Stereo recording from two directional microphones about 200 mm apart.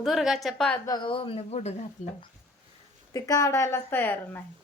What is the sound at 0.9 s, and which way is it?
Speech, 25° left (ahead or behind).